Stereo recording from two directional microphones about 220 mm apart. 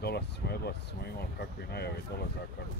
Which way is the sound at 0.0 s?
45° left (ahead or behind).